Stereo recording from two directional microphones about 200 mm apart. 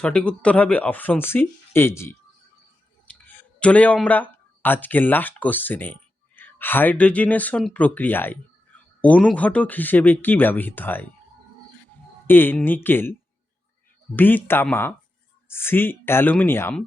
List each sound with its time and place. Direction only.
0.0 s speech: 5° left (ahead or behind)
3.3 s speech: 5° left (ahead or behind)
12.3 s speech: 10° left (ahead or behind)
14.2 s speech: 10° left (ahead or behind)